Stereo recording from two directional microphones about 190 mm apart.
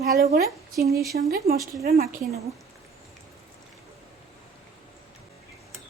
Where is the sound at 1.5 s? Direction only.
15° right (ahead or behind).